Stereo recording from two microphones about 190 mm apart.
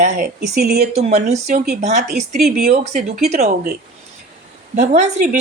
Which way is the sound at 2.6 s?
55° right (ahead or behind).